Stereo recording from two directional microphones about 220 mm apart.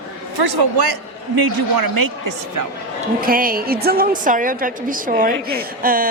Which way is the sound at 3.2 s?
40° right (ahead or behind).